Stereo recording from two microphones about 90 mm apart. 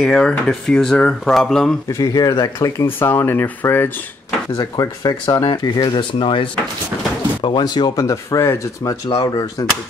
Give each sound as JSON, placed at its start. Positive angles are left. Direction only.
{"t": 0.0, "sound": "speech", "side_deg": 10}
{"t": 1.9, "sound": "speech", "side_deg": 40}
{"t": 3.0, "sound": "speech", "side_deg": 25}
{"t": 4.6, "sound": "speech", "side_deg": 40}
{"t": 5.2, "sound": "speech", "side_deg": 55}
{"t": 7.4, "sound": "speech", "side_deg": 55}
{"t": 9.2, "sound": "speech", "side_deg": 50}